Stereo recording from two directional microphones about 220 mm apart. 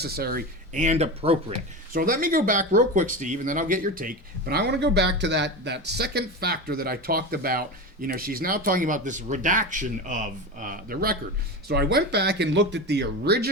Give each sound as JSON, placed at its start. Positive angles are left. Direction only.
{"t": 0.0, "sound": "speech", "side_deg": -45}
{"t": 1.9, "sound": "speech", "side_deg": -40}